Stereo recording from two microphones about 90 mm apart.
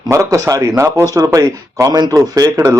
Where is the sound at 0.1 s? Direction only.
40° right (ahead or behind).